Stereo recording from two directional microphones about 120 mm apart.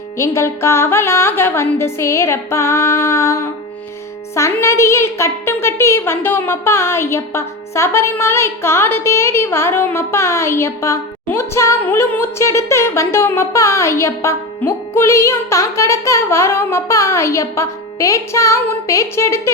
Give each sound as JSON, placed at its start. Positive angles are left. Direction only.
{"t": 0.2, "sound": "a woman's voice", "side_deg": 25}
{"t": 4.6, "sound": "a woman's voice", "side_deg": 25}